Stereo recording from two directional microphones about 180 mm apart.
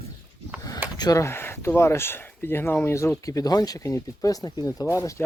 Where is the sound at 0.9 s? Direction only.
20° left (ahead or behind).